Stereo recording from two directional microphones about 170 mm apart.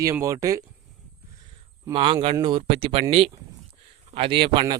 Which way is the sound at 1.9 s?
30° right (ahead or behind).